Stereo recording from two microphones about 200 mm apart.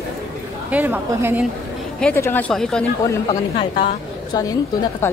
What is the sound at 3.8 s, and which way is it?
Speech, 20° left (ahead or behind).